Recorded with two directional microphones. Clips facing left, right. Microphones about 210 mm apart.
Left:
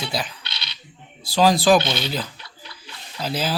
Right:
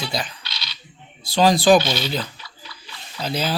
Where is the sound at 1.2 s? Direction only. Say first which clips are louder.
Right 1 dB; 5° left (ahead or behind).